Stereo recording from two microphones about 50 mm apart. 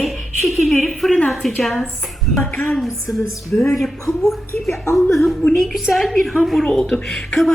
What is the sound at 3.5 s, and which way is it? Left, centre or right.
Speech, left.